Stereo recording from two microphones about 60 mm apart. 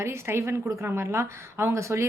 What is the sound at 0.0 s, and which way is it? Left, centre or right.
A woman's voice, right.